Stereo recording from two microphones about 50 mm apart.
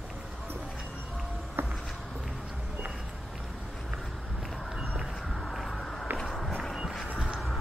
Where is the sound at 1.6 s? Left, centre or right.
Right.